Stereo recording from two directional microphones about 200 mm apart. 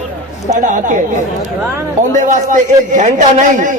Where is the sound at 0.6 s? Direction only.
40° right (ahead or behind).